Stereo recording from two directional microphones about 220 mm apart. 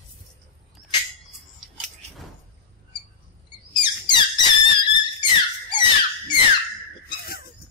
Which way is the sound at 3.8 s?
20° left (ahead or behind).